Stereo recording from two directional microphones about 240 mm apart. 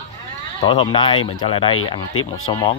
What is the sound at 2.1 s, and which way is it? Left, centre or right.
Speech, left.